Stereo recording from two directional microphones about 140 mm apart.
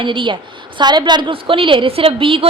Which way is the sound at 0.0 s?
35° right (ahead or behind).